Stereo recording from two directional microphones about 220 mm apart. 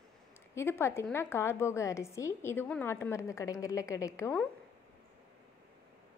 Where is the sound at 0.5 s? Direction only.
10° left (ahead or behind).